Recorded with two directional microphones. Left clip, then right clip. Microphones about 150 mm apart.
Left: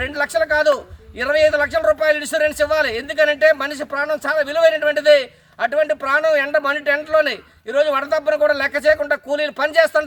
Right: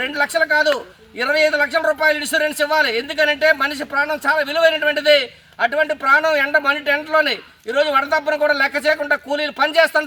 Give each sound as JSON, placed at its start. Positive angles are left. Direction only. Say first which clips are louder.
{"t": 0.1, "sound": "a man's voice", "louder": "right 1 dB", "side_deg": 30}